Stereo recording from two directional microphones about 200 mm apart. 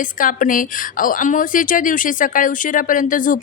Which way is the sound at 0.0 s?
40° left (ahead or behind).